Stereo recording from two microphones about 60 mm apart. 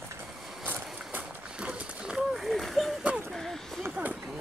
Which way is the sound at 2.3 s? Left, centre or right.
Centre.